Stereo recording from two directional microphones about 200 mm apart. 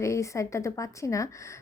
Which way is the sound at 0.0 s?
15° left (ahead or behind).